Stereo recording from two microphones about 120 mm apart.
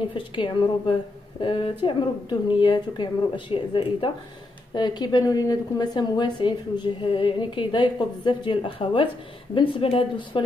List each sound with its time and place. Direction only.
0.1 s a woman's voice: 40° left (ahead or behind)